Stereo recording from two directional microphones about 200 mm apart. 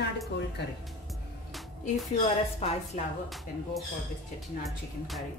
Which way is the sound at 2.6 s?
30° left (ahead or behind).